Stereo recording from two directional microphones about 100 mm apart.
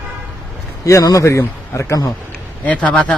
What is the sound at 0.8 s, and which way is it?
A man's voice, 35° left (ahead or behind).